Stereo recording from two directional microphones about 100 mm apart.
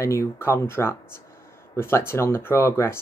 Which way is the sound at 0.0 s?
30° left (ahead or behind).